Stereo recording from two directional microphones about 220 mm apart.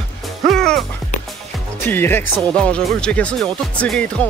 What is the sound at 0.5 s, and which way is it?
Speech, centre (ahead or behind).